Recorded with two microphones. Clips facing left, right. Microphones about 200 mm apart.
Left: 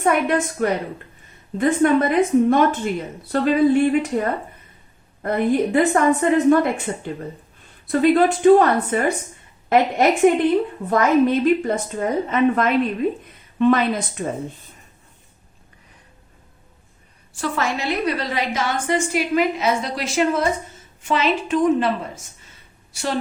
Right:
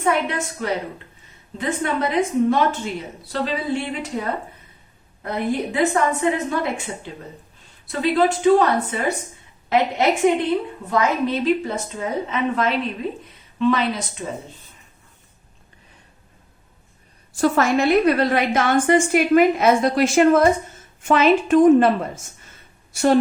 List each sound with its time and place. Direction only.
0.0 s a woman's voice: 50° left (ahead or behind)
17.3 s a woman's voice: 45° right (ahead or behind)